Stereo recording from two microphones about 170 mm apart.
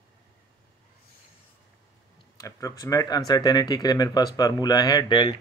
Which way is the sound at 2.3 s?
20° left (ahead or behind).